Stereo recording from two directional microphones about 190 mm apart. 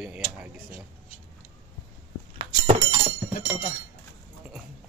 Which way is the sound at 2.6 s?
30° right (ahead or behind).